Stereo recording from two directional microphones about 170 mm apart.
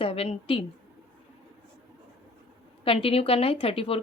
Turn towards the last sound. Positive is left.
turn(degrees=35)  # may be behind; listen again after turning